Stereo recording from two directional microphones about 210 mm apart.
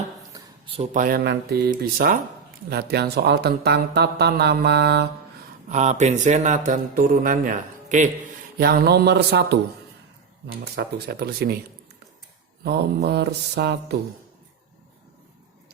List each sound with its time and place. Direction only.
0.3 s a sound: 25° right (ahead or behind)
0.9 s a man's voice: 45° right (ahead or behind)
5.6 s a man's voice: 35° right (ahead or behind)
8.5 s speech: 45° right (ahead or behind)
12.6 s speech: 50° right (ahead or behind)